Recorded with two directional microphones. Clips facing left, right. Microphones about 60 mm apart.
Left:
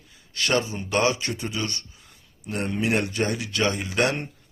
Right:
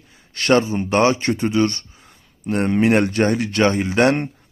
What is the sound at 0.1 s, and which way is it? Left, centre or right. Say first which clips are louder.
Speech: right 8 dB; right.